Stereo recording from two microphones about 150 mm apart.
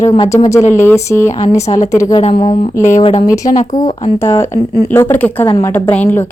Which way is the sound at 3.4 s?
55° left (ahead or behind).